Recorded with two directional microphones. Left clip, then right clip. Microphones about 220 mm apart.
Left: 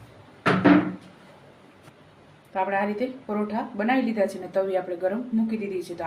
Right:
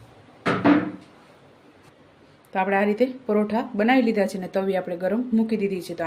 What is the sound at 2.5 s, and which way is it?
A woman's voice, 50° right (ahead or behind).